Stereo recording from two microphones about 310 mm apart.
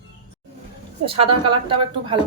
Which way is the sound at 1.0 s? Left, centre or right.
Centre.